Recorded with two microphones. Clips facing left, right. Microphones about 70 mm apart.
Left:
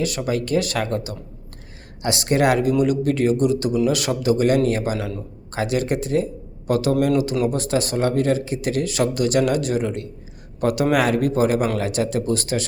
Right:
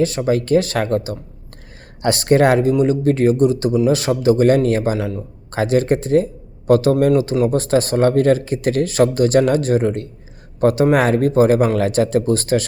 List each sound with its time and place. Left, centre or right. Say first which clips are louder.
0.0 s a man's voice: right 6 dB; right
7.2 s speech: right 4 dB; right